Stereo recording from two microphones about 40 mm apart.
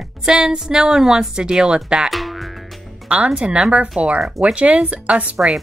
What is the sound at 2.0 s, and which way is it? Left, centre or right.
Speech, centre.